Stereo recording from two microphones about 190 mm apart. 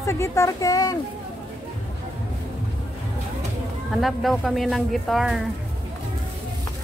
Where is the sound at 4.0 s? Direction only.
Centre (ahead or behind).